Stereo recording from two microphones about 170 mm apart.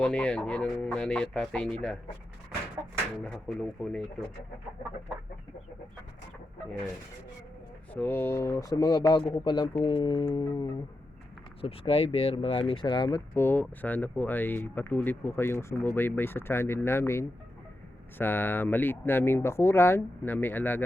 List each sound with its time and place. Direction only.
0.0 s speech: 5° left (ahead or behind)
3.2 s speech: 5° left (ahead or behind)
7.9 s speech: 10° left (ahead or behind)
11.6 s speech: 35° left (ahead or behind); by 20.8 s 10° left (ahead or behind)